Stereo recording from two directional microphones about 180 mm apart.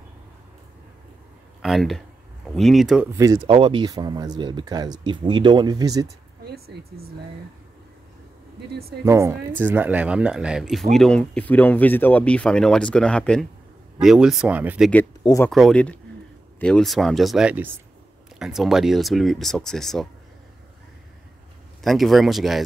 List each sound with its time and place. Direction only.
1.6 s speech: centre (ahead or behind)
3.1 s a woman's voice: 20° right (ahead or behind)
3.4 s speech: 30° right (ahead or behind)
6.4 s speech: 60° right (ahead or behind)
9.0 s a woman's voice: 15° right (ahead or behind)
15.2 s speech: 20° left (ahead or behind)
15.5 s speech: 5° left (ahead or behind)
21.8 s speech: centre (ahead or behind)